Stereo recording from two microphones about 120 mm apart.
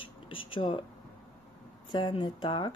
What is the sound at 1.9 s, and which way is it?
Speech, 40° left (ahead or behind).